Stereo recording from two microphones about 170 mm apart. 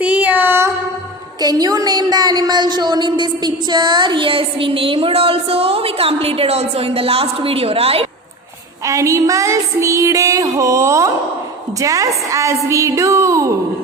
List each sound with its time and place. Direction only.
0.0 s child singing: 10° right (ahead or behind)
1.4 s a woman's voice: 25° right (ahead or behind)
8.8 s a sound: 20° right (ahead or behind)
11.8 s a woman's voice: 20° right (ahead or behind)